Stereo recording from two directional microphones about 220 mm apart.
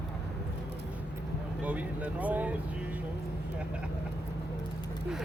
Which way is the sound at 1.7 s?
5° right (ahead or behind).